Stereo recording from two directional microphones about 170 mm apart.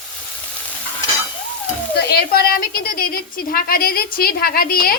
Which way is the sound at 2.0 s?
70° left (ahead or behind).